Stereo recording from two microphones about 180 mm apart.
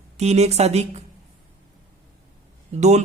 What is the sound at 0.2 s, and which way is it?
Speech, 35° right (ahead or behind).